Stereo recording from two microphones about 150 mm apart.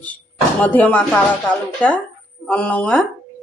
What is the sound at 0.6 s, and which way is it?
Speech, 10° left (ahead or behind).